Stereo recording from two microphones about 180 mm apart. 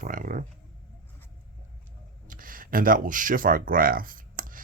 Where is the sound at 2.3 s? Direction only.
50° right (ahead or behind).